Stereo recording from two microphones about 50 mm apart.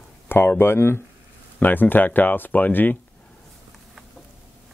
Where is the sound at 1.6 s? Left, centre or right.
Left.